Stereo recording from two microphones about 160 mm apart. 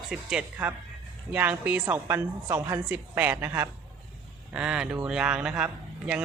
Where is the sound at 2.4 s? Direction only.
25° right (ahead or behind).